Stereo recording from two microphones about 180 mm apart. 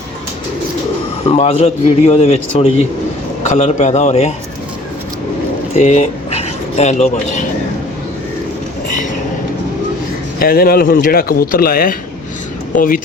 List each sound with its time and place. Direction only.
1.4 s a man's voice: 35° left (ahead or behind)
5.7 s speech: 40° left (ahead or behind)
10.4 s speech: 55° left (ahead or behind)